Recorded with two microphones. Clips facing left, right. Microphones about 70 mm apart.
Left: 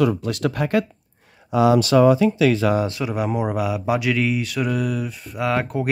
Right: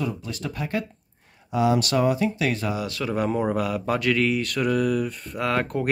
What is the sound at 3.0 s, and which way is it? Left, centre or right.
Speech, centre.